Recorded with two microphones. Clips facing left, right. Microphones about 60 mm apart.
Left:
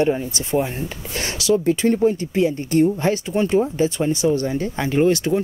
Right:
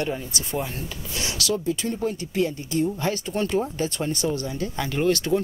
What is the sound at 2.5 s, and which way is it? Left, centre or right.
Speech, left.